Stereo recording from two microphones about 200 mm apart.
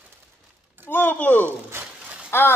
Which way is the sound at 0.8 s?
10° left (ahead or behind).